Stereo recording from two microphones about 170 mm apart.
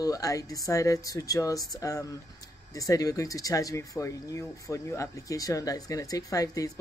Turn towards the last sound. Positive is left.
turn(degrees=20)  # may be behind; listen again after turning